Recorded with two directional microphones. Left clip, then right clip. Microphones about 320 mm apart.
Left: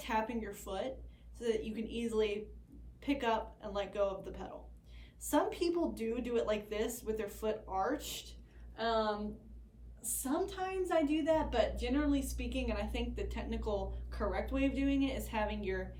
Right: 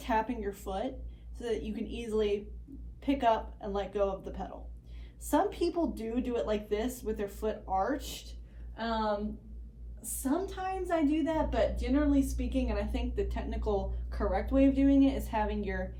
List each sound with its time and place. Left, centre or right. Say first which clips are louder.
0.0 s a woman's voice: right 5 dB; centre